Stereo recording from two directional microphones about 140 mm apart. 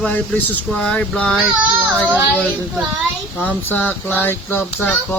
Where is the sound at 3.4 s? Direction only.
10° left (ahead or behind).